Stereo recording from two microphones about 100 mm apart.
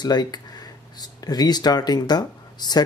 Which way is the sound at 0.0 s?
45° left (ahead or behind).